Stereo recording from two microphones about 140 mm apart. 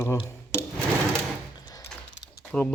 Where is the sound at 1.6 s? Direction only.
25° left (ahead or behind).